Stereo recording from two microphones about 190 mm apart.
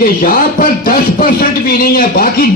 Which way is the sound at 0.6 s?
50° left (ahead or behind).